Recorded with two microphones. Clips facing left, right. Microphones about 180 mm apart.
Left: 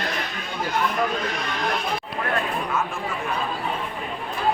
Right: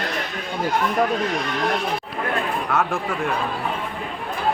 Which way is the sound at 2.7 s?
70° right (ahead or behind).